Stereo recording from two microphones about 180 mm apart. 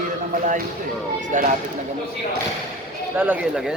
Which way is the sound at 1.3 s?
45° right (ahead or behind).